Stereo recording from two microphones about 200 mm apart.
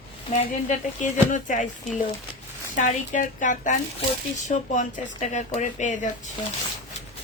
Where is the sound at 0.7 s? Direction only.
40° left (ahead or behind).